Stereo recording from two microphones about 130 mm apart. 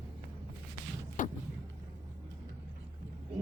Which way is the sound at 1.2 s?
80° left.